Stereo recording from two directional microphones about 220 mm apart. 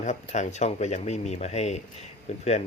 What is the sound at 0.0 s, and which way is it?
Speech, 30° left (ahead or behind).